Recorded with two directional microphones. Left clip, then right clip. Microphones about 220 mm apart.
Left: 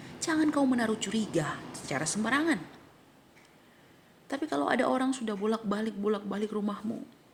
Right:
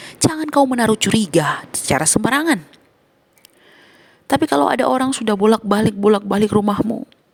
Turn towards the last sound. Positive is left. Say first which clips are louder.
# right 17 dB
turn(degrees=-50)  # may be behind; listen again after turning